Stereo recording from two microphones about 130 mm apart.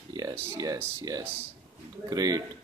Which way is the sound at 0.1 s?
25° right (ahead or behind).